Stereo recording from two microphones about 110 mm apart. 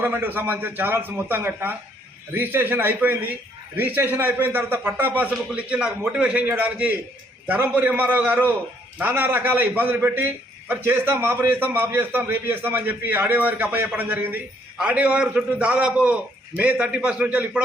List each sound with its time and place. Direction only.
0.0 s a man's voice: 15° right (ahead or behind)